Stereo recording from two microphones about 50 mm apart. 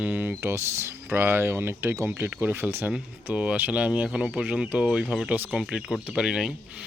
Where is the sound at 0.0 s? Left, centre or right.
Right.